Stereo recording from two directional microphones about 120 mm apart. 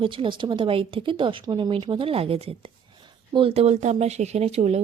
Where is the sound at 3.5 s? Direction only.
70° right (ahead or behind).